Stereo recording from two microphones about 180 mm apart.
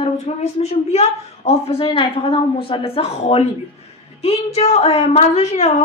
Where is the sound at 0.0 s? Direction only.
35° left (ahead or behind).